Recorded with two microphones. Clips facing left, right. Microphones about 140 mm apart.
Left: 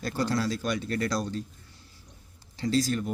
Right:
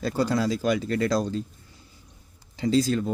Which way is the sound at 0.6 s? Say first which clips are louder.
Right 5 dB; 90° right.